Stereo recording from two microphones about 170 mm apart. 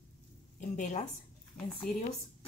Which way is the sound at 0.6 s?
45° left (ahead or behind).